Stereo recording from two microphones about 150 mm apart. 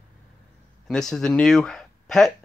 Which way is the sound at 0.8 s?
5° left (ahead or behind).